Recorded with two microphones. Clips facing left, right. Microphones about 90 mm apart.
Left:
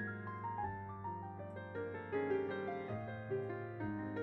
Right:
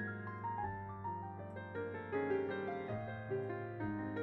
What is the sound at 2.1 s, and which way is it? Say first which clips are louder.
Music: even; 40° right (ahead or behind).